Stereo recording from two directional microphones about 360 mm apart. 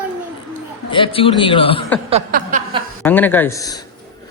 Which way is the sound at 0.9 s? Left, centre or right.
Centre.